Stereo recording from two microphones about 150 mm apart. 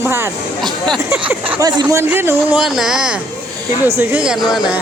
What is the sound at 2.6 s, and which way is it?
Speech, 5° right (ahead or behind).